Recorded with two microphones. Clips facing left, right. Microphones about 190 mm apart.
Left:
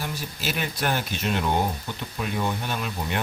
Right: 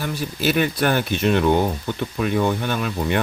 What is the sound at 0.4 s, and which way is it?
Speech, 55° right (ahead or behind).